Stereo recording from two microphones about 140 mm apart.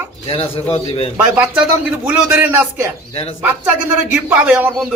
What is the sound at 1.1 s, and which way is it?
A man's voice, 10° right (ahead or behind).